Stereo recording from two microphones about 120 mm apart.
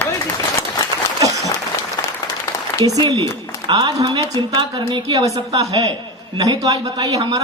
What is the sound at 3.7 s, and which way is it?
Speech, 35° right (ahead or behind).